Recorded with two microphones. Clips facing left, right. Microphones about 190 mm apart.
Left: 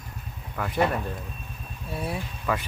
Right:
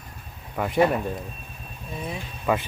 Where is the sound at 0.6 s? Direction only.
20° right (ahead or behind).